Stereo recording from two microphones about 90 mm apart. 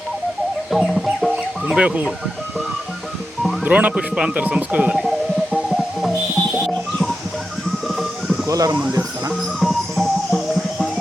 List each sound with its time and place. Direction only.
0.7 s music: centre (ahead or behind)
1.6 s speech: 15° right (ahead or behind)
3.6 s speech: 15° right (ahead or behind)
4.9 s music: centre (ahead or behind)
8.4 s speech: 40° right (ahead or behind)
9.6 s music: centre (ahead or behind)